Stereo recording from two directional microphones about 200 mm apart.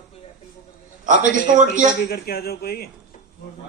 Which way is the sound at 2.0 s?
50° left (ahead or behind).